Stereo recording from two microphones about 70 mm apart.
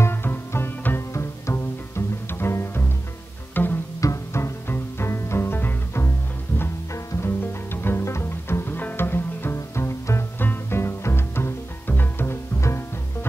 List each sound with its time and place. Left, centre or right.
0.0 s music: left
3.6 s pizzicato: left
4.0 s music: left